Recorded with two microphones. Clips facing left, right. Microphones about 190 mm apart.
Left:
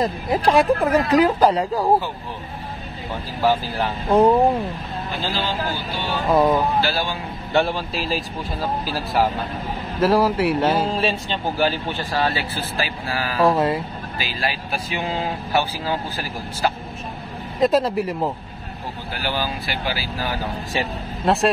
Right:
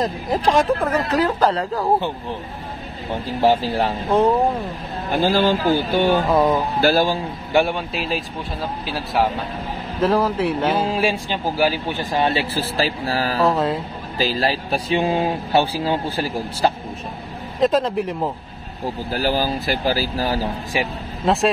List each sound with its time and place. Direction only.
0.0 s speech: 5° left (ahead or behind)
3.3 s speech: 35° right (ahead or behind)
5.1 s speech: 50° right (ahead or behind)
6.3 s speech: centre (ahead or behind)
6.8 s speech: 45° right (ahead or behind)
7.5 s speech: 5° right (ahead or behind)
10.8 s speech: 10° right (ahead or behind); by 13.4 s 35° right (ahead or behind)
13.6 s speech: centre (ahead or behind)
14.1 s speech: 40° right (ahead or behind)
17.6 s speech: 5° left (ahead or behind)
19.1 s speech: 40° right (ahead or behind)
21.2 s speech: centre (ahead or behind)